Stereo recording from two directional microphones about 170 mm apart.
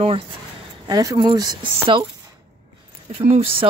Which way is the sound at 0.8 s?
20° right (ahead or behind).